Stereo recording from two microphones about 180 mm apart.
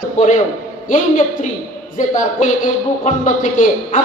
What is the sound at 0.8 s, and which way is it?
Speech, 45° left (ahead or behind).